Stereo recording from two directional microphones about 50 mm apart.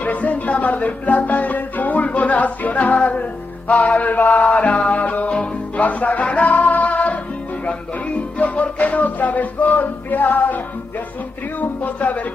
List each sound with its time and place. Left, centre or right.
0.0 s music: left
8.4 s music: left
11.8 s music: left